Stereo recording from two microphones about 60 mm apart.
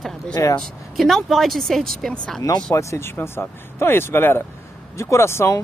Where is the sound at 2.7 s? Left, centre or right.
Left.